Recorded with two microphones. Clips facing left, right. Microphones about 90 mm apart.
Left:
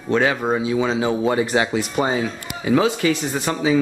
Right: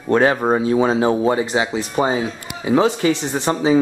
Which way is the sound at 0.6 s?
45° right (ahead or behind).